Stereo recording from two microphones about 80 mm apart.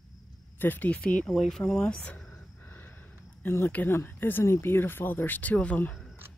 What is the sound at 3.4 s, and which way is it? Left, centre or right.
Speech, left.